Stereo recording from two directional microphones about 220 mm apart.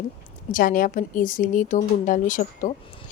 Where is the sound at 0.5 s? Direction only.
40° left (ahead or behind).